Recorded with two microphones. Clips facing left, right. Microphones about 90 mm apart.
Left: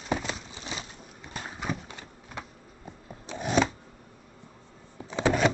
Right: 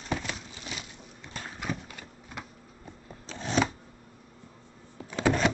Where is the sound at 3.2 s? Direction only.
15° left (ahead or behind).